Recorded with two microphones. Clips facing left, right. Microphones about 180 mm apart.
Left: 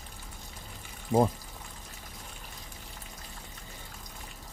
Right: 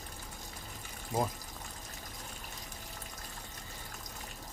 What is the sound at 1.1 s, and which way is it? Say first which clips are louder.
Speech: left 9 dB; 30° left (ahead or behind).